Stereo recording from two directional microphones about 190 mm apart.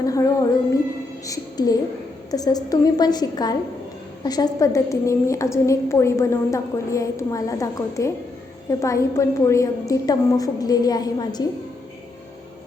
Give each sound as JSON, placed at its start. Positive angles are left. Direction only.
{"t": 0.0, "sound": "music", "side_deg": 15}
{"t": 1.2, "sound": "a woman's voice", "side_deg": 20}